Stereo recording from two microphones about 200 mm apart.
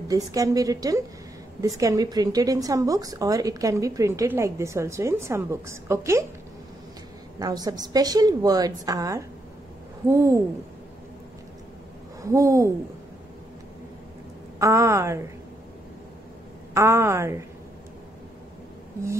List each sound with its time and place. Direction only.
0.1 s a woman's voice: 15° right (ahead or behind)
7.3 s a woman's voice: 20° right (ahead or behind)
12.2 s a woman's voice: 15° right (ahead or behind)
14.6 s a woman's voice: 15° right (ahead or behind)
16.7 s a woman's voice: 15° right (ahead or behind)